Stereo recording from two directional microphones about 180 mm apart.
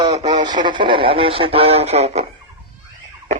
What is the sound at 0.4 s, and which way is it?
Speech, 25° right (ahead or behind).